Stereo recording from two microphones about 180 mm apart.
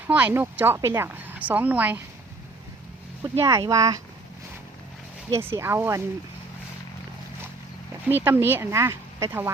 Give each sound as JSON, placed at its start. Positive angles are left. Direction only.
{"t": 0.1, "sound": "speech", "side_deg": -10}
{"t": 3.3, "sound": "speech", "side_deg": -15}
{"t": 5.3, "sound": "speech", "side_deg": -15}
{"t": 8.2, "sound": "speech", "side_deg": -10}